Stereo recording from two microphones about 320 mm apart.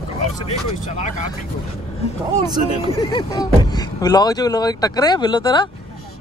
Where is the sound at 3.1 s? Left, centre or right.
Centre.